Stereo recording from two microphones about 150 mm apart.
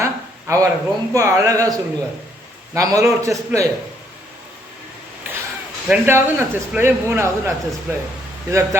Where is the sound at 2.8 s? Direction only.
20° right (ahead or behind).